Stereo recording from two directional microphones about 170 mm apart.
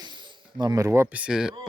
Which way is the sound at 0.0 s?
30° right (ahead or behind).